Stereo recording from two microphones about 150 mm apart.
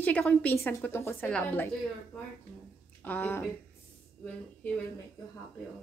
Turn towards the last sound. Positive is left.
turn(degrees=10)  # may be behind; listen again after turning